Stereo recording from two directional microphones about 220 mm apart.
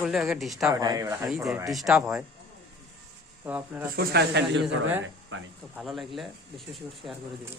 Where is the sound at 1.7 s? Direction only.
Centre (ahead or behind).